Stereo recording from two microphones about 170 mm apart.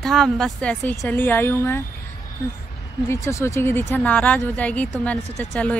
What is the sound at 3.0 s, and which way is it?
A woman's voice, 15° left (ahead or behind).